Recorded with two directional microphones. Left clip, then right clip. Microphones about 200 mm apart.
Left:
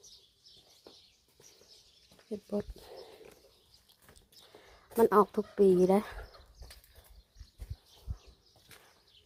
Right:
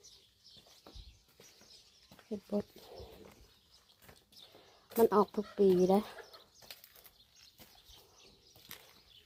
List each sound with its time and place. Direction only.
2.3 s speech: 10° left (ahead or behind)
4.6 s speech: 15° left (ahead or behind)